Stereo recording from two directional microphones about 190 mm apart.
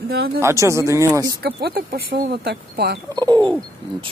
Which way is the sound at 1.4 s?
55° right (ahead or behind).